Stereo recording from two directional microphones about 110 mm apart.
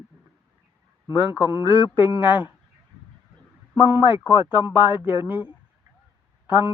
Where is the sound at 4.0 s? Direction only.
50° left (ahead or behind).